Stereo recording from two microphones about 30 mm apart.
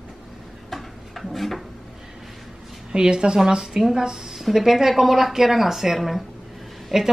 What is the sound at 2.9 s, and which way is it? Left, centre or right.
A woman's voice, right.